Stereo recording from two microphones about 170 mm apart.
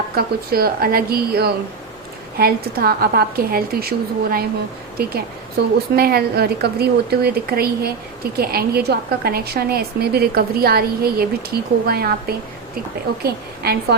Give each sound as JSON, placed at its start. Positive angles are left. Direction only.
{"t": 0.2, "sound": "a woman's voice", "side_deg": -60}
{"t": 13.2, "sound": "a woman's voice", "side_deg": -65}